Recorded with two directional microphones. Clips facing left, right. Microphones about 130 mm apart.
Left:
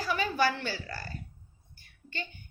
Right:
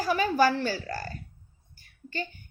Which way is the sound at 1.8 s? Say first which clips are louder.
Right 6 dB; 45° right (ahead or behind).